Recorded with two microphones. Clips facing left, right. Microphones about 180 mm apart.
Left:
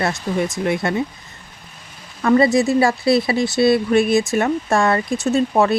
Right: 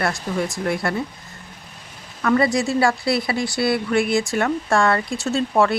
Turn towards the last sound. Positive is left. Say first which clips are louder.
# left 3 dB
turn(degrees=20)  # may be behind; listen again after turning